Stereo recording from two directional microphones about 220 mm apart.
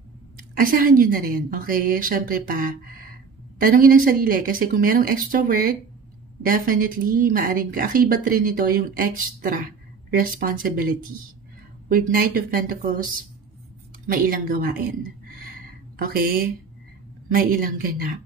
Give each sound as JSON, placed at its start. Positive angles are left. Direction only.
{"t": 0.6, "sound": "a woman's voice", "side_deg": -40}
{"t": 16.0, "sound": "a woman's voice", "side_deg": -40}